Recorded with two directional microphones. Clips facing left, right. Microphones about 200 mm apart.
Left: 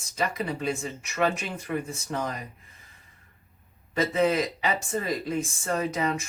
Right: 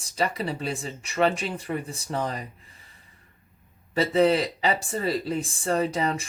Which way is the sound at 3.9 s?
35° right (ahead or behind).